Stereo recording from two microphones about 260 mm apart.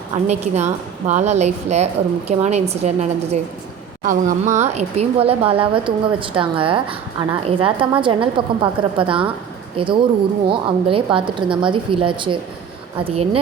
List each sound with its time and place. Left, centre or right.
0.3 s speech: right